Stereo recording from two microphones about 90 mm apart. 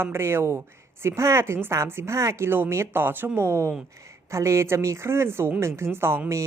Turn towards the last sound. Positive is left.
turn(degrees=-25)  # may be behind; listen again after turning